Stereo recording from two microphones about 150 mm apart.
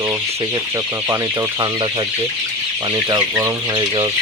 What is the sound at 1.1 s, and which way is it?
Speech, 25° right (ahead or behind).